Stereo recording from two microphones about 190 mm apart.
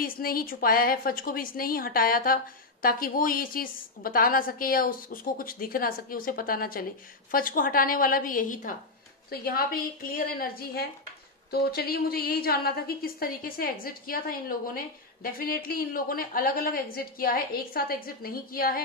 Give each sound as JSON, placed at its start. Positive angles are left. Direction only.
{"t": 0.0, "sound": "a woman's voice", "side_deg": 50}